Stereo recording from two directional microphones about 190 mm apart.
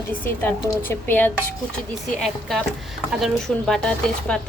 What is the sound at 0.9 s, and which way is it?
Speech, 10° left (ahead or behind).